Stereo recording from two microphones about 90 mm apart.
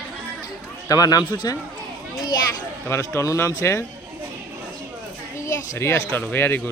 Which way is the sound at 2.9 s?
30° left (ahead or behind).